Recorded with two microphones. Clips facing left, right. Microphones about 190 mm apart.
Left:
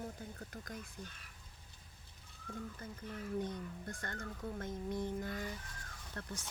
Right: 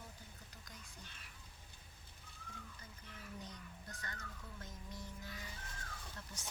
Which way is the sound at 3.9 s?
50° left (ahead or behind).